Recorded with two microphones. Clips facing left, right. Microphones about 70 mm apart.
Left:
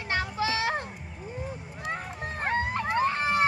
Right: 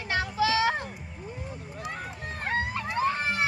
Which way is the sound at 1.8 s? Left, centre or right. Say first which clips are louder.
Left 3 dB; left.